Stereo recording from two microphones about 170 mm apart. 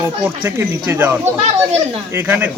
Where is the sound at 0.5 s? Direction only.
15° right (ahead or behind).